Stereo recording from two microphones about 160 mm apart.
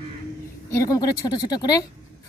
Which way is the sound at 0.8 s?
20° left (ahead or behind).